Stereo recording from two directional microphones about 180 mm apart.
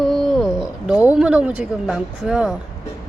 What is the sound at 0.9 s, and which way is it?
Speech, 5° right (ahead or behind).